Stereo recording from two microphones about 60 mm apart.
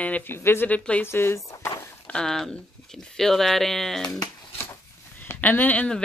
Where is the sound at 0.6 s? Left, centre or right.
Left.